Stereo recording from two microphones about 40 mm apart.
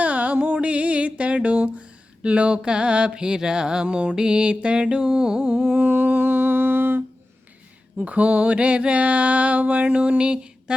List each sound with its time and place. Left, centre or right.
0.0 s music: right
0.3 s a sound: right
2.6 s mantra: right
3.8 s mantra: right
4.1 s mantra: right
5.4 s humming: right
7.9 s mantra: right